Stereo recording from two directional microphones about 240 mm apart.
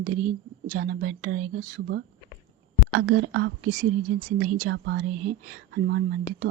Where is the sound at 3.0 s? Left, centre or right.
Right.